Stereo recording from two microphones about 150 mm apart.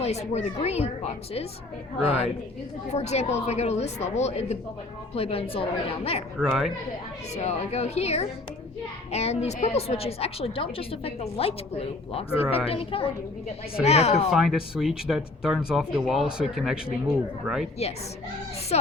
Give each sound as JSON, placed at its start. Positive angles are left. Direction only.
{"t": 0.0, "sound": "a woman's voice", "side_deg": 45}
{"t": 6.4, "sound": "speech", "side_deg": -5}
{"t": 7.3, "sound": "a woman's voice", "side_deg": 45}
{"t": 14.3, "sound": "speech", "side_deg": 0}
{"t": 18.7, "sound": "a woman's voice", "side_deg": 45}